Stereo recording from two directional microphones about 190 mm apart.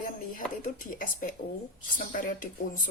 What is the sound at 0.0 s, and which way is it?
Speech, 45° left (ahead or behind).